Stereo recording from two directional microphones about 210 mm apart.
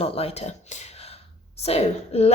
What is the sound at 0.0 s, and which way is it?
A woman's voice, 30° left (ahead or behind).